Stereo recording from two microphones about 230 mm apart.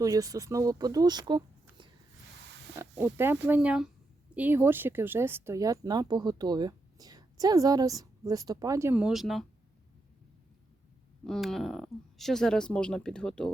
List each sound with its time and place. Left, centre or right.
0.0 s speech: centre
3.4 s speech: centre
11.3 s speech: centre